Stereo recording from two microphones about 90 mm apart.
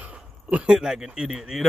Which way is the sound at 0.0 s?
15° right (ahead or behind).